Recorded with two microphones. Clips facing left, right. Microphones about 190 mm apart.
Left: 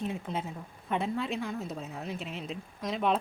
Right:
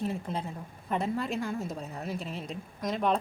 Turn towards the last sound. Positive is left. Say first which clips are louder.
# right 1 dB
turn(degrees=0)  # may be behind; listen again after turning